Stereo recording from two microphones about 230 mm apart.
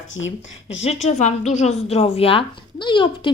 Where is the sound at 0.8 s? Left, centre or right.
Left.